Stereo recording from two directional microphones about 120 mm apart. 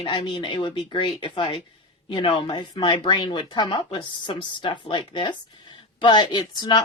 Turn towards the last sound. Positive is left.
turn(degrees=35)  # may be behind; listen again after turning